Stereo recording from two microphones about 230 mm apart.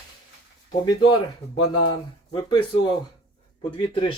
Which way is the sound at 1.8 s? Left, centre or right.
Centre.